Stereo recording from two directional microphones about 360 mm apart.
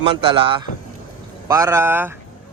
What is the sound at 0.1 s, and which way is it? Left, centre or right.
A man's voice, centre.